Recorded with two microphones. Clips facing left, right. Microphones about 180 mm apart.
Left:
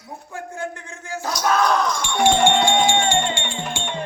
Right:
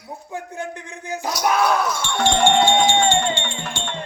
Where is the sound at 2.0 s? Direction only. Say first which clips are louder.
Left 2 dB; 15° left (ahead or behind).